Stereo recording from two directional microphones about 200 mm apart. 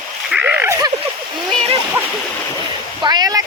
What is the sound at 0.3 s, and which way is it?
Splash, 5° right (ahead or behind).